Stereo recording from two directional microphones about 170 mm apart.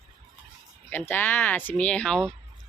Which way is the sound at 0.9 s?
10° left (ahead or behind).